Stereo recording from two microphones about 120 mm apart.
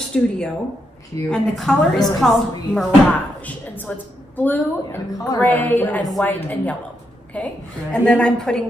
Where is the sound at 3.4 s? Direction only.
10° left (ahead or behind).